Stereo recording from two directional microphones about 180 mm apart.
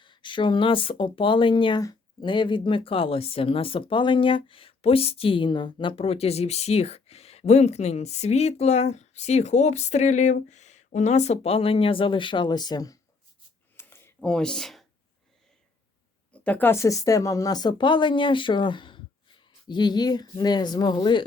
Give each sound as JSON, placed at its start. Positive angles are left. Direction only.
{"t": 0.0, "sound": "speech", "side_deg": 25}
{"t": 13.7, "sound": "a sound", "side_deg": 15}
{"t": 16.3, "sound": "speech", "side_deg": 10}